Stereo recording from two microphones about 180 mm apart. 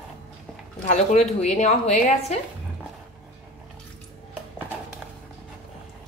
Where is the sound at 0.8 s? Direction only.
40° left (ahead or behind).